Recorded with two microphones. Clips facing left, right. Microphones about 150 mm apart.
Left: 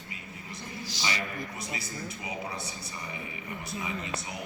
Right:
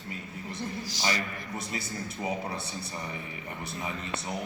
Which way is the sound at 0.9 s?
45° right (ahead or behind).